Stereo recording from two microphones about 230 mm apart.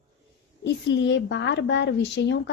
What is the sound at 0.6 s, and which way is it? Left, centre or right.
A woman's voice, left.